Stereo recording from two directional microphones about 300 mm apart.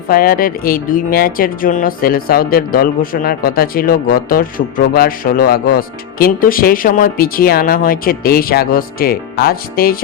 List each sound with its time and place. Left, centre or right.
0.1 s speech: left